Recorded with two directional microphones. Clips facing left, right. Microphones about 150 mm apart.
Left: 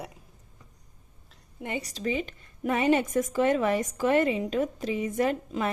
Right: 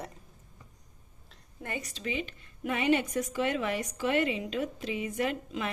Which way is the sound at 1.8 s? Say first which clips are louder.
Left 7 dB; 40° left (ahead or behind).